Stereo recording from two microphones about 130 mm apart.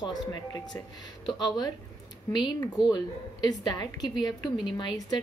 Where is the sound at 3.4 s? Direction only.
30° left (ahead or behind).